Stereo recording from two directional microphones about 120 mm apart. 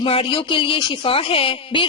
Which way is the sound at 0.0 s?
50° left (ahead or behind).